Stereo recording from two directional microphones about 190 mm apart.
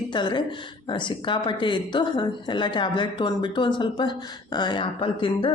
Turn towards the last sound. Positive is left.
turn(degrees=25)  # may be behind; listen again after turning